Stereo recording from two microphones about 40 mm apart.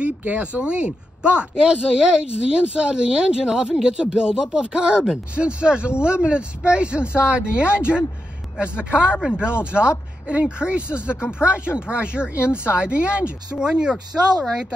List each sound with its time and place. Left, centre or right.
0.3 s speech: right